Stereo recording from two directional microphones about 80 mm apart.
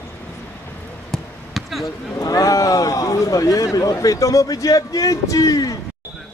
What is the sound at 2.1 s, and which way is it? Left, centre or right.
Speech, left.